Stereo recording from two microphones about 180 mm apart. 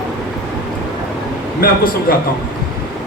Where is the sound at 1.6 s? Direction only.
55° left (ahead or behind).